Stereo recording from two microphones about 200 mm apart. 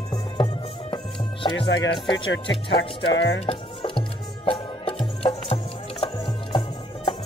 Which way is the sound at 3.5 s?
25° left (ahead or behind).